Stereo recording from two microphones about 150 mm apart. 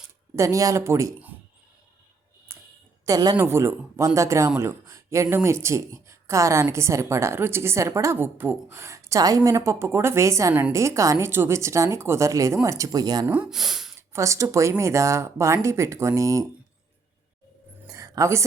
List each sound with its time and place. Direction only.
0.3 s speech: 20° right (ahead or behind)
2.5 s a sound: 15° right (ahead or behind)
3.1 s speech: 25° right (ahead or behind)
3.3 s speech: 15° right (ahead or behind)
13.2 s speech: 10° right (ahead or behind)
14.1 s speech: 20° right (ahead or behind)
17.8 s a sound: 20° right (ahead or behind)